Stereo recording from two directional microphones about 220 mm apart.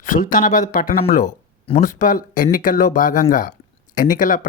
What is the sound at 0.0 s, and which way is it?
Speech, 35° left (ahead or behind).